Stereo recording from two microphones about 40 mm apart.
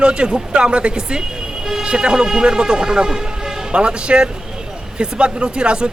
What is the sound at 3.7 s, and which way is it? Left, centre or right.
Speech, right.